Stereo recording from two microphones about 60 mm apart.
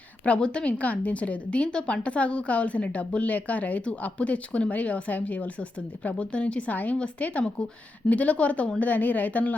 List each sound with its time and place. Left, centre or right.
0.3 s speech: centre